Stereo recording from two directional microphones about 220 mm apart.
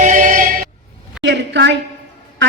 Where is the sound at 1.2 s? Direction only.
50° right (ahead or behind).